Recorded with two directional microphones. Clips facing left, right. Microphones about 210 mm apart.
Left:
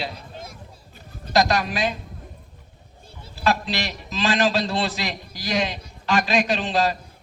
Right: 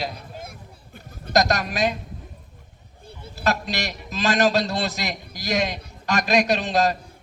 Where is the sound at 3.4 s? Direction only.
45° right (ahead or behind).